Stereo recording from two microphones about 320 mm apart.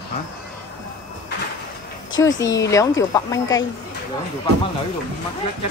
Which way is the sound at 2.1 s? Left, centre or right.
Left.